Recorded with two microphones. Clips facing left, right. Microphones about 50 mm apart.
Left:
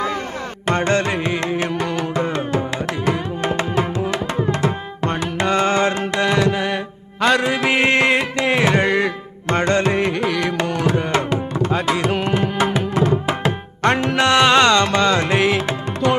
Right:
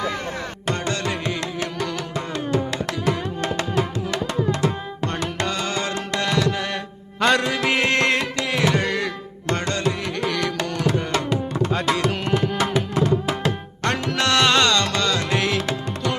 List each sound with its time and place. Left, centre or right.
0.7 s carnatic music: left
5.1 s music: centre
5.5 s music: left
6.1 s music: centre
7.2 s music: centre
7.4 s music: centre
8.4 s carnatic music: left
10.1 s music: centre
10.6 s carnatic music: centre
11.7 s tabla: centre